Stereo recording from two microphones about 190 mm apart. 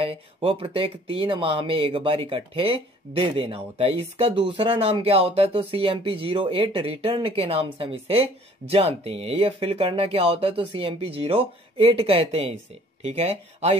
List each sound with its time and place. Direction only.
0.0 s speech: 30° right (ahead or behind)